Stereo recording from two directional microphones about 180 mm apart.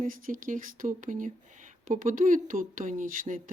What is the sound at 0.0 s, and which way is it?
Speech, 50° right (ahead or behind).